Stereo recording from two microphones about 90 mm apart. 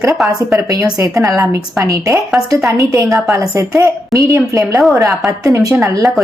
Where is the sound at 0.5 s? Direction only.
35° right (ahead or behind).